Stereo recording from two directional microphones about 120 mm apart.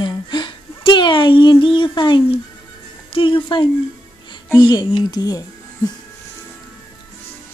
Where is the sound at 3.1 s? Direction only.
45° left (ahead or behind).